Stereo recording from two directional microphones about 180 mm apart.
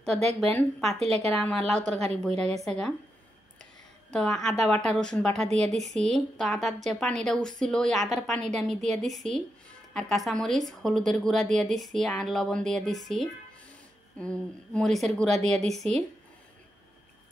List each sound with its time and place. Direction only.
0.2 s a woman's voice: 35° right (ahead or behind)
0.5 s a woman's voice: 5° left (ahead or behind)
4.1 s a woman's voice: 5° left (ahead or behind)